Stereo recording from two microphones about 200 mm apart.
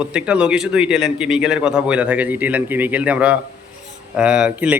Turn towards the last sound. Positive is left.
turn(degrees=-5)  # may be behind; listen again after turning